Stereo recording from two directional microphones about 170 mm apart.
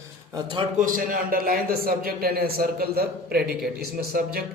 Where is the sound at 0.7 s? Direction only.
55° right (ahead or behind).